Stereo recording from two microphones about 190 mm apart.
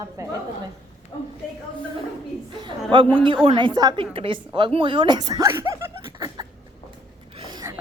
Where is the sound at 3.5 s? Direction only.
25° right (ahead or behind).